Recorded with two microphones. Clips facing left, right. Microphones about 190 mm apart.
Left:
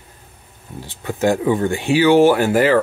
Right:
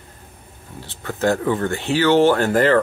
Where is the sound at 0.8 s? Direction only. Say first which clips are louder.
Left 2 dB; 15° left (ahead or behind).